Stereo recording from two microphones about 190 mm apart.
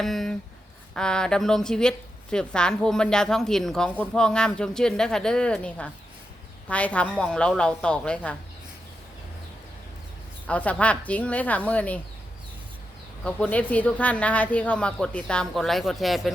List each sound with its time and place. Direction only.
0.0 s a woman's voice: centre (ahead or behind)
10.4 s speech: 5° left (ahead or behind)
13.2 s speech: 5° left (ahead or behind)